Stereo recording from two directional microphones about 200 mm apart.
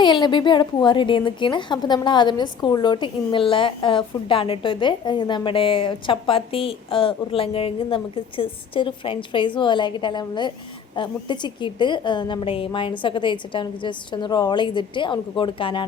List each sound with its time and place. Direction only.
0.0 s a woman's voice: 20° left (ahead or behind)